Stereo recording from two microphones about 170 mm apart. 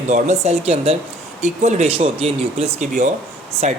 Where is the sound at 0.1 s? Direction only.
40° right (ahead or behind).